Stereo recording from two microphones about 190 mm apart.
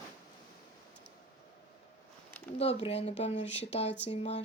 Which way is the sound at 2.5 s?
35° left (ahead or behind).